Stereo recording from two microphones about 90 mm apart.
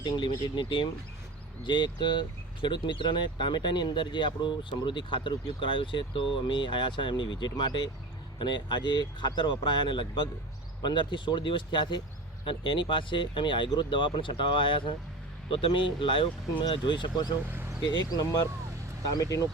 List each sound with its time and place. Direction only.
0.0 s speech: 65° left (ahead or behind)
15.4 s speech: 80° left; by 17.3 s 55° left (ahead or behind)
17.5 s a sound: 25° right (ahead or behind)
17.8 s speech: 50° left (ahead or behind)